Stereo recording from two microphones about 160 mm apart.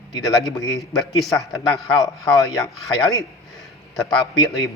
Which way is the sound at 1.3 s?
20° left (ahead or behind).